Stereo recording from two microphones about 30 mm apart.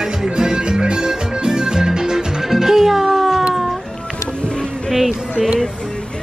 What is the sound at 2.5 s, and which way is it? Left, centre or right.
Music, centre.